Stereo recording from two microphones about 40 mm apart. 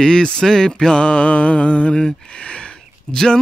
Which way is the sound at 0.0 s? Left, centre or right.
Centre.